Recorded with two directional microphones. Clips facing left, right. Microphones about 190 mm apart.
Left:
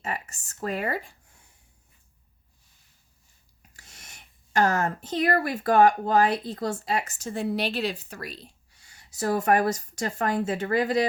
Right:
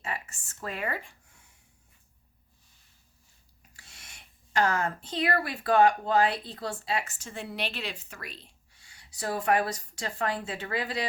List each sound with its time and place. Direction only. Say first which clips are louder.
0.0 s speech: left 4 dB; 40° left (ahead or behind)
3.8 s speech: left 3 dB; 40° left (ahead or behind)